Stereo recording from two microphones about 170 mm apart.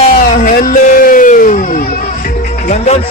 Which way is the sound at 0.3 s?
55° left (ahead or behind).